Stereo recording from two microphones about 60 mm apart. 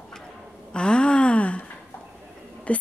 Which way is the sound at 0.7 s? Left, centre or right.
Centre.